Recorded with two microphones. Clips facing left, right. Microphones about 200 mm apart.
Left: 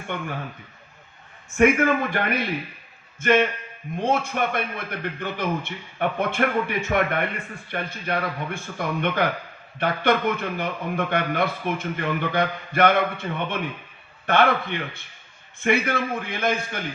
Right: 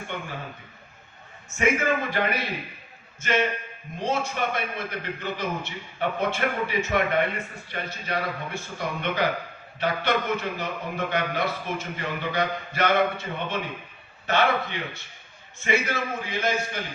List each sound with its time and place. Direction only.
1.5 s a man's voice: 55° left (ahead or behind)